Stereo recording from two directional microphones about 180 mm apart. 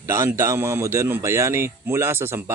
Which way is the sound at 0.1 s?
15° right (ahead or behind).